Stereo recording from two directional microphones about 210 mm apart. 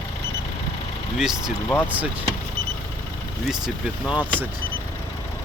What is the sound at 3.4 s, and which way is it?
Speech, centre (ahead or behind).